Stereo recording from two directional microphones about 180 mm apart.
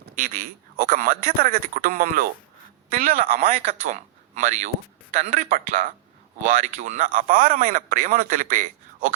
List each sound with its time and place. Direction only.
0.0 s speech: 50° right (ahead or behind)
3.1 s speech: 35° right (ahead or behind); by 5.9 s 50° right (ahead or behind)
6.5 s speech: 40° right (ahead or behind)